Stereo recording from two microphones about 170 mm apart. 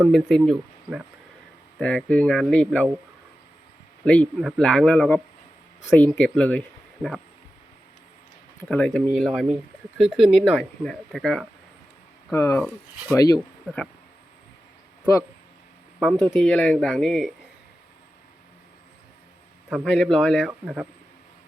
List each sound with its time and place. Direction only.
0.0 s speech: centre (ahead or behind)
4.0 s speech: 5° left (ahead or behind)
8.6 s speech: 5° left (ahead or behind)
12.3 s speech: 15° left (ahead or behind)
13.7 s speech: centre (ahead or behind)
16.0 s speech: centre (ahead or behind)
19.7 s speech: centre (ahead or behind)